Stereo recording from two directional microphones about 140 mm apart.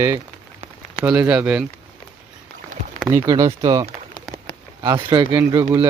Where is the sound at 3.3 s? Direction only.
25° right (ahead or behind).